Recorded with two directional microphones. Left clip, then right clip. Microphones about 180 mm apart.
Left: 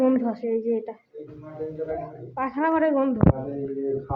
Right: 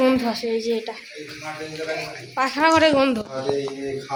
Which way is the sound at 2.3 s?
5° right (ahead or behind).